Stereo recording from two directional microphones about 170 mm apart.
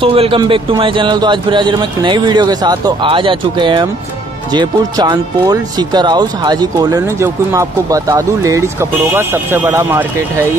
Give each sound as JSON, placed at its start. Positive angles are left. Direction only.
{"t": 0.0, "sound": "a man's voice", "side_deg": -30}